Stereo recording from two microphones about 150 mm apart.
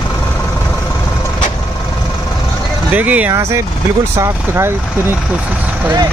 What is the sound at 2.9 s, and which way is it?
Speech, 10° right (ahead or behind).